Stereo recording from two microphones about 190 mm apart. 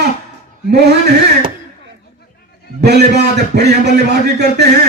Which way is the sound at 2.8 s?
60° right (ahead or behind).